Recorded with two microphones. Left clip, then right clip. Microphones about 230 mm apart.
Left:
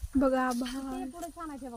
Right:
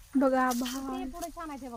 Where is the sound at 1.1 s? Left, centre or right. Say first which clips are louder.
Right 2 dB; right.